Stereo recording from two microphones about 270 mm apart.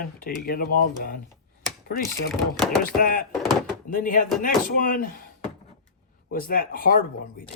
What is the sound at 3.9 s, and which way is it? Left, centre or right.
Speech, left.